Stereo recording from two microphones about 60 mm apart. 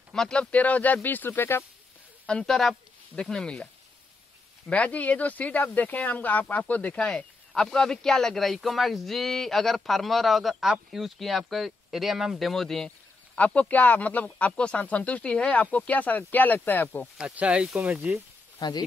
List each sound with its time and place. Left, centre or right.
0.1 s speech: centre; by 1.6 s left
2.4 s speech: centre
4.6 s speech: left
7.0 s speech: centre
13.4 s speech: left
17.4 s speech: centre